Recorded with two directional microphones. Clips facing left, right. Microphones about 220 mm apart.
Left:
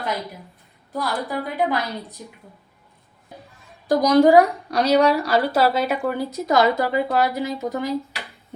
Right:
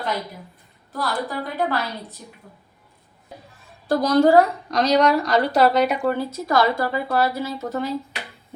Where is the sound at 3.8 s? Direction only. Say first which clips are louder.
Left 2 dB; 15° left (ahead or behind).